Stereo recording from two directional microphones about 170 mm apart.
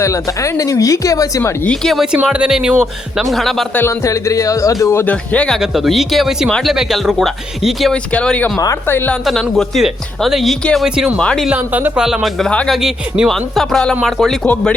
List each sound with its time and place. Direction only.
0.0 s speech: 20° left (ahead or behind)
1.7 s speech: centre (ahead or behind)
3.8 s speech: 20° left (ahead or behind)
8.5 s speech: 15° left (ahead or behind)
9.2 s speech: centre (ahead or behind)
11.4 s speech: 10° right (ahead or behind); by 14.8 s 10° left (ahead or behind)